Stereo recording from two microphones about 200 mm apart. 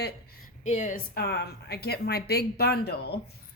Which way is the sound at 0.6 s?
35° left (ahead or behind).